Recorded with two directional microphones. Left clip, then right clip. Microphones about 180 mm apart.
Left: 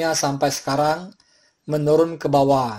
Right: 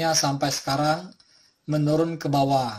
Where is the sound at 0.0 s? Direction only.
30° left (ahead or behind).